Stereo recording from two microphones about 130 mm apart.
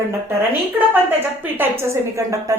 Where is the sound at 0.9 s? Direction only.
15° right (ahead or behind).